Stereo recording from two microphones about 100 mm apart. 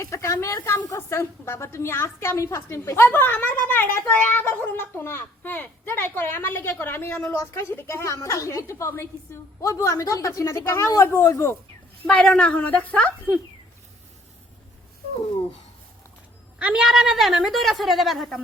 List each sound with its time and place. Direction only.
0.0 s a woman's voice: 30° left (ahead or behind)
12.0 s a woman's voice: 15° left (ahead or behind)
16.6 s a woman's voice: 10° right (ahead or behind)